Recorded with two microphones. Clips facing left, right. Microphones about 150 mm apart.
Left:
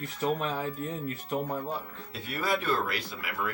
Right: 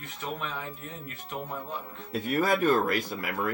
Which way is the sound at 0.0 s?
40° left (ahead or behind).